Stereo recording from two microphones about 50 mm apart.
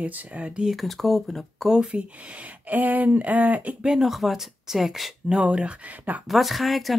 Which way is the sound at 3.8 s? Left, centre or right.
Centre.